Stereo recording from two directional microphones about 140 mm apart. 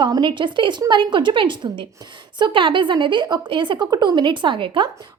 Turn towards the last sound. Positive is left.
turn(degrees=-35)  # may be behind; listen again after turning